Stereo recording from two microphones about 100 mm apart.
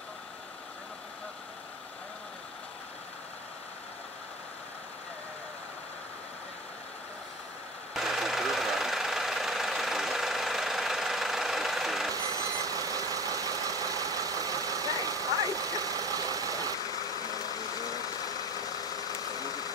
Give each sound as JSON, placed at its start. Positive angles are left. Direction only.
{"t": 7.9, "sound": "vehicle", "side_deg": -5}
{"t": 12.1, "sound": "vehicle", "side_deg": -35}
{"t": 16.9, "sound": "vehicle", "side_deg": 40}